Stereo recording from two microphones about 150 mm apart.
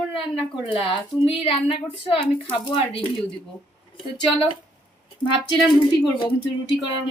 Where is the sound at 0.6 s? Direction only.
35° left (ahead or behind).